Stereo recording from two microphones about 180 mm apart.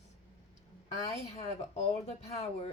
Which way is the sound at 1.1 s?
35° left (ahead or behind).